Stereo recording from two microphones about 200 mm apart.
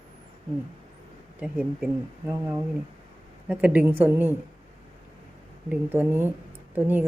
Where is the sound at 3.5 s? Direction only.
5° right (ahead or behind).